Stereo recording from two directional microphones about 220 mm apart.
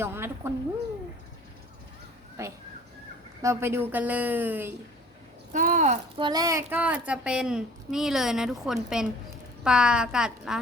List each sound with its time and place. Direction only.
0.0 s a woman's voice: 10° right (ahead or behind)
2.4 s speech: 15° right (ahead or behind)
5.5 s speech: 35° right (ahead or behind)
6.2 s a woman's voice: 15° right (ahead or behind)